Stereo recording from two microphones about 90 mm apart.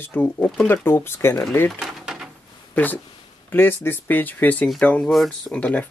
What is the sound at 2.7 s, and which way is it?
Speech, 20° left (ahead or behind).